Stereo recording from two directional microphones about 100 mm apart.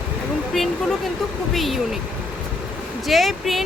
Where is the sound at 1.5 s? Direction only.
Centre (ahead or behind).